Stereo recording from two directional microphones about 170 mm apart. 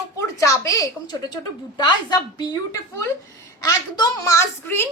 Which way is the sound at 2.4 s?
20° left (ahead or behind).